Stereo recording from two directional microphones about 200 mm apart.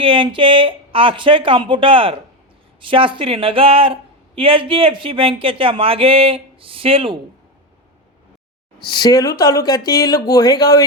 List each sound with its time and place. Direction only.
0.0 s speech: 25° right (ahead or behind)
8.8 s speech: 20° left (ahead or behind)